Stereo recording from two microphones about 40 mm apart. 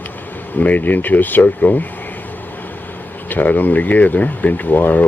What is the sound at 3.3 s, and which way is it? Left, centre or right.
Speech, left.